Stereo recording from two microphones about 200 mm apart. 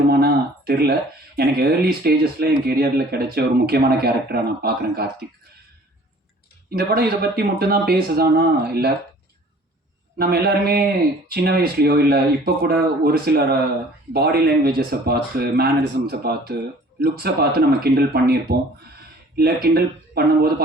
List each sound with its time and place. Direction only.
0.1 s a sound: 50° right (ahead or behind)
1.4 s speech: 50° right (ahead or behind)
6.7 s speech: 50° right (ahead or behind)
10.2 s speech: 50° right (ahead or behind)
19.6 s speech: 50° right (ahead or behind)